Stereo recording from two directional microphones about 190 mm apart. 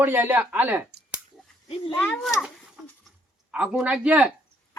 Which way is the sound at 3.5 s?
5° right (ahead or behind).